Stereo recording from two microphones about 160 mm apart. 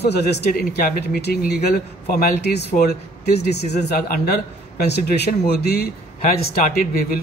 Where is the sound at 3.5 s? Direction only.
90° left; by 7.2 s 60° left (ahead or behind).